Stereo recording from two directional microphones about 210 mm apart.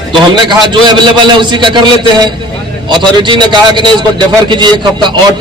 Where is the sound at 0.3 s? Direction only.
20° right (ahead or behind).